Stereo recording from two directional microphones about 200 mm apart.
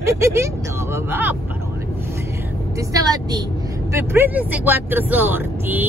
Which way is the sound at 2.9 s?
20° right (ahead or behind).